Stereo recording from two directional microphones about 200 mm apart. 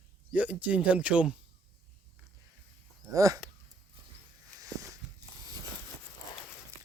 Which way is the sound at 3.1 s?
15° right (ahead or behind).